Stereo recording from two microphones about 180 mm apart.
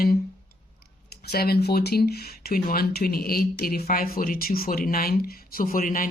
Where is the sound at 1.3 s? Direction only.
60° left (ahead or behind).